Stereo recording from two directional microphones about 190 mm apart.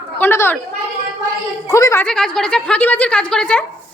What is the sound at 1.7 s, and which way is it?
Speech, 15° left (ahead or behind).